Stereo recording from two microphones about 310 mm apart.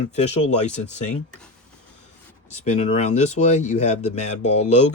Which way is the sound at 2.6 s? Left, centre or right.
Left.